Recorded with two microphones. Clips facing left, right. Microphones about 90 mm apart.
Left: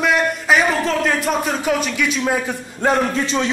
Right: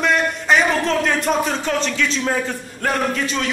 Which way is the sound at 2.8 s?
25° left (ahead or behind).